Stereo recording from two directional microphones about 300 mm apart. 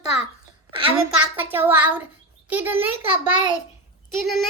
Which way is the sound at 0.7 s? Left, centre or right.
Centre.